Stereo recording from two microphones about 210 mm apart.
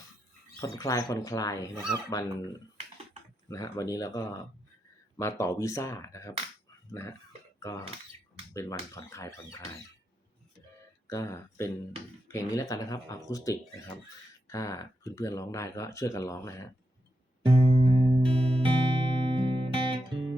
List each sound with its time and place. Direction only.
0.6 s speech: 15° left (ahead or behind)
3.5 s speech: 15° left (ahead or behind)
7.6 s speech: 15° left (ahead or behind)
11.1 s speech: 15° left (ahead or behind)
17.7 s music: 25° right (ahead or behind)